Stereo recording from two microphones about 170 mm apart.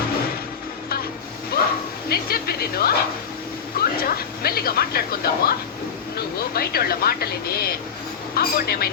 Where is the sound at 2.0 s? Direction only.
65° left (ahead or behind).